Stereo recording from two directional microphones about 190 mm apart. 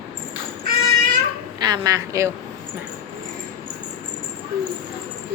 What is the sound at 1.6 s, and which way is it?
Speech, 20° right (ahead or behind).